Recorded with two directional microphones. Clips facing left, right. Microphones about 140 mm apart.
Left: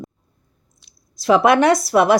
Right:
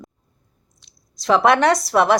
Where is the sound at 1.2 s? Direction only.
10° left (ahead or behind).